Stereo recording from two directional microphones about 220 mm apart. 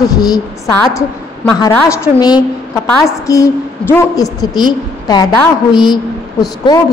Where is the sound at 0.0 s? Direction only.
15° left (ahead or behind).